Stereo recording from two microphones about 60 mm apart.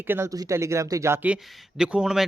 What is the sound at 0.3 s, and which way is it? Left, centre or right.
Speech, right.